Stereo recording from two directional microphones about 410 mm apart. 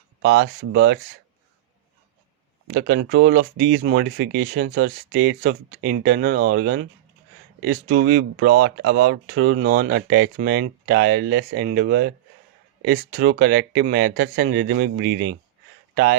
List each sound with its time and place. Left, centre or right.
0.2 s speech: right
2.7 s speech: right